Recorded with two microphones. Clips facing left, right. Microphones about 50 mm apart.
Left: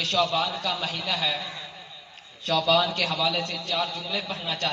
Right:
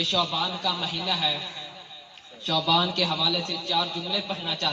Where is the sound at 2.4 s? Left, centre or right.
Left.